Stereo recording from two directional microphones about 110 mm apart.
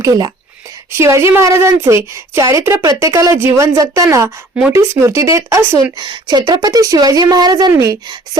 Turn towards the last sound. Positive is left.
turn(degrees=-30)  # may be behind; listen again after turning